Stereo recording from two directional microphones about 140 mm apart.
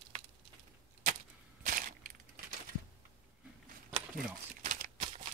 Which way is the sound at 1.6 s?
75° right (ahead or behind).